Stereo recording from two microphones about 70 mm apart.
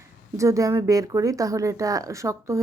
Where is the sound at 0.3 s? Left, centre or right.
Right.